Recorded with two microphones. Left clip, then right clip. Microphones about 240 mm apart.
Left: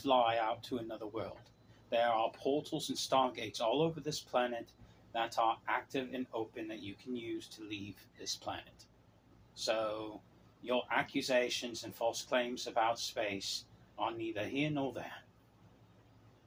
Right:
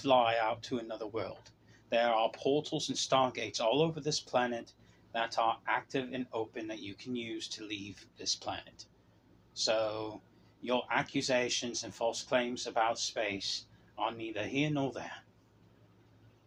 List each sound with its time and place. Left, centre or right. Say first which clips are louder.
0.0 s speech: right 3 dB; right
9.6 s speech: right 4 dB; right